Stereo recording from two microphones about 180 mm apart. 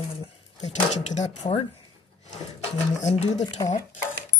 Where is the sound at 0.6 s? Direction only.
40° left (ahead or behind).